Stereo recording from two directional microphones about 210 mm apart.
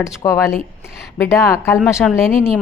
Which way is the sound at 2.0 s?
5° right (ahead or behind).